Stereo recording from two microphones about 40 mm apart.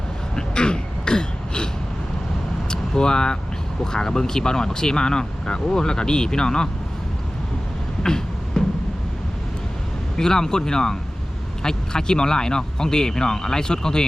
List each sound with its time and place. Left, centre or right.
0.3 s throat clearing: left
2.6 s vehicle: centre
3.9 s speech: centre
8.0 s beatboxing: centre
10.2 s speech: centre